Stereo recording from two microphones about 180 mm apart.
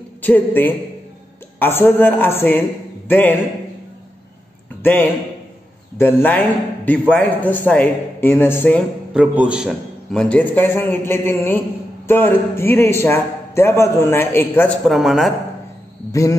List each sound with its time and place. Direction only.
0.2 s a man's voice: 10° left (ahead or behind)
4.8 s a man's voice: 10° left (ahead or behind)
9.1 s a man's voice: 5° right (ahead or behind); by 14.8 s 10° left (ahead or behind)
14.9 s speech: centre (ahead or behind)
16.1 s a man's voice: 15° left (ahead or behind)